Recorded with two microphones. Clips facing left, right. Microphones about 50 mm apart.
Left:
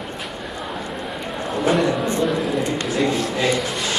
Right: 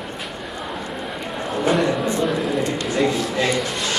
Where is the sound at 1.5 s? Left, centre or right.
Centre.